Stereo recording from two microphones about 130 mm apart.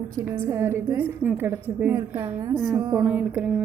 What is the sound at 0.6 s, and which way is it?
A woman's voice, 15° right (ahead or behind).